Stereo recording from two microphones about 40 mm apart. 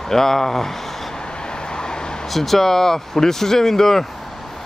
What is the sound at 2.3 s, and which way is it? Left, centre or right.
Speech, centre.